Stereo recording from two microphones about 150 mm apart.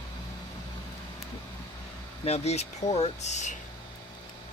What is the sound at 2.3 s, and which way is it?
Speech, 45° left (ahead or behind).